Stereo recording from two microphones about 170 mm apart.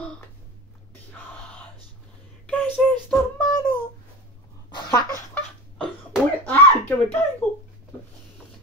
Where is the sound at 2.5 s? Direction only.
10° left (ahead or behind).